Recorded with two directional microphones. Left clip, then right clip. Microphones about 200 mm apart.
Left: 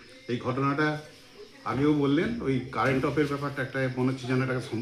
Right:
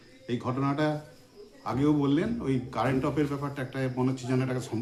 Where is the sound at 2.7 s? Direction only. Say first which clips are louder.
Left 2 dB; 25° right (ahead or behind).